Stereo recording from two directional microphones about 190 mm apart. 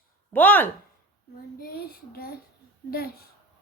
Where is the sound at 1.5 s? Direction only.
55° left (ahead or behind).